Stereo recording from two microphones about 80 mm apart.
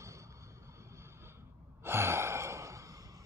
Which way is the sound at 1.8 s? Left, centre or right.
Right.